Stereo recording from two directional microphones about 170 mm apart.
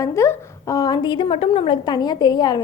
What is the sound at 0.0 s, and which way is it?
A woman's voice, 20° left (ahead or behind).